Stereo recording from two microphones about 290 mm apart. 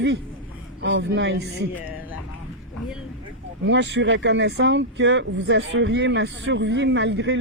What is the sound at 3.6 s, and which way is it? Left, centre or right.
Speech, right.